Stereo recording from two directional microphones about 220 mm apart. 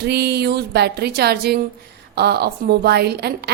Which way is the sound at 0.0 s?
50° right (ahead or behind).